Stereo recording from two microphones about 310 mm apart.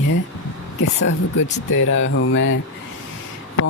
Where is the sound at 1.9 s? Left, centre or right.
Left.